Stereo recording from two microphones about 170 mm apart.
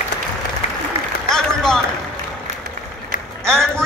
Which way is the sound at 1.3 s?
5° left (ahead or behind).